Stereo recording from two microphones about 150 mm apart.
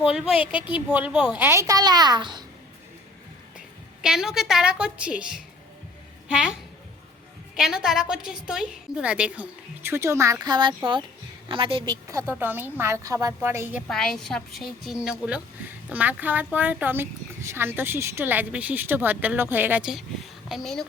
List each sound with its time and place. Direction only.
0.1 s speech: 5° right (ahead or behind)
1.4 s a woman's voice: 20° right (ahead or behind)
4.0 s a woman's voice: 5° right (ahead or behind); by 11.9 s 35° right (ahead or behind)
12.0 s speech: 15° right (ahead or behind)
13.8 s a woman's voice: 5° left (ahead or behind)
15.9 s a woman's voice: 10° right (ahead or behind)